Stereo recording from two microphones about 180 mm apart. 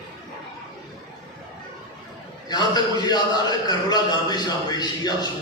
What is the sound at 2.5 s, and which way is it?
A man's voice, 20° left (ahead or behind).